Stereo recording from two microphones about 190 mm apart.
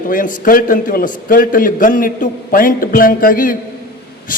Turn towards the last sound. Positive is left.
turn(degrees=45)  # may be behind; listen again after turning